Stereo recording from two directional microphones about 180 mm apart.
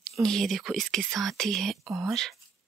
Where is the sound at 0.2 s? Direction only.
Centre (ahead or behind).